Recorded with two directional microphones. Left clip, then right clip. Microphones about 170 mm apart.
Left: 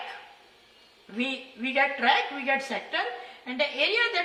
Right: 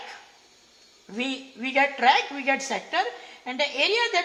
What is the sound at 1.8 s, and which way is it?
A woman's voice, 25° right (ahead or behind).